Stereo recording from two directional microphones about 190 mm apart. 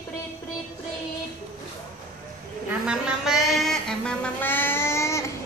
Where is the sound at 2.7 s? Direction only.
5° right (ahead or behind).